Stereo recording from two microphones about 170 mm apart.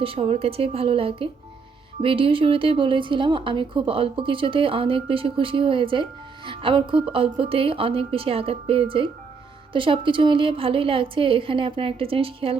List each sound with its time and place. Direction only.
0.0 s a woman's voice: 35° right (ahead or behind)